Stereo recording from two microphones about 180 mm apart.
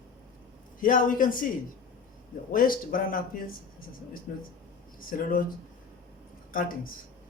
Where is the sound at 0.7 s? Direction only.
50° left (ahead or behind).